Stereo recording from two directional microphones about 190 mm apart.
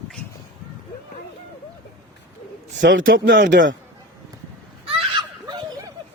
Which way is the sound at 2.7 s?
75° right (ahead or behind).